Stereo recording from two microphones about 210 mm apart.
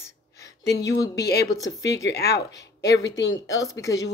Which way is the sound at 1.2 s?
50° left (ahead or behind).